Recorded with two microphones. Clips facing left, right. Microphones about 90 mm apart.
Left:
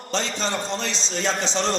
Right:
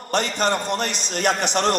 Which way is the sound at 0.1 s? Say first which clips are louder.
Right 5 dB; 60° right (ahead or behind).